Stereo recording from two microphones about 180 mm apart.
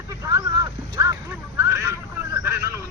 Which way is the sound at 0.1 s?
20° right (ahead or behind).